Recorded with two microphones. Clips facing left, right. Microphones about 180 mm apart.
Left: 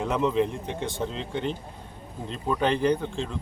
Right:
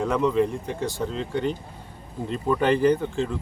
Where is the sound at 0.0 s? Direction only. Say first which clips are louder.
Right 2 dB; centre (ahead or behind).